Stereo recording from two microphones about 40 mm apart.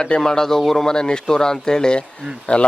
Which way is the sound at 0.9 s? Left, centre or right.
Centre.